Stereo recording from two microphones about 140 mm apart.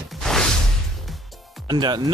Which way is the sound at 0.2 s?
5° left (ahead or behind).